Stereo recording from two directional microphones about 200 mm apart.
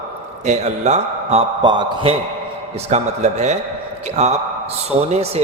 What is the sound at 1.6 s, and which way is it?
A man's voice, 20° right (ahead or behind).